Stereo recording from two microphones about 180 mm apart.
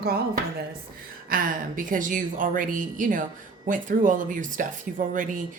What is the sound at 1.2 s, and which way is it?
Speech, 50° right (ahead or behind).